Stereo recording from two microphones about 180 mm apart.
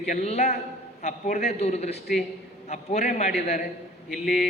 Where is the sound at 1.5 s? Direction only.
35° left (ahead or behind).